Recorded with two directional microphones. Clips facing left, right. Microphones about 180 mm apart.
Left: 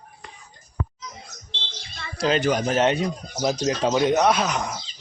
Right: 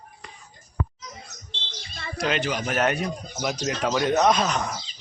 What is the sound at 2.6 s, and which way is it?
Speech, 25° left (ahead or behind).